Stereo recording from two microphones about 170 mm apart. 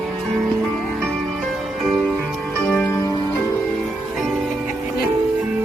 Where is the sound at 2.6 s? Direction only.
10° left (ahead or behind).